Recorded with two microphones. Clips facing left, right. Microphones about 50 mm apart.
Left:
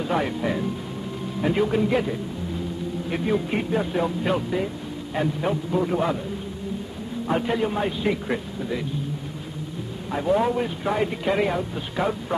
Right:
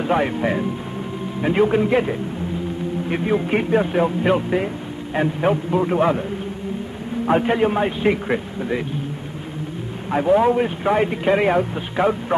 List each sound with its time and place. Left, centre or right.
0.0 s a man's voice: right
7.2 s speech: right
10.1 s speech: right